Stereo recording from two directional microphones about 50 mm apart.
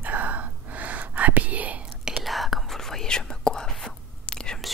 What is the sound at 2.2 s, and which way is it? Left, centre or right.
Whispering, centre.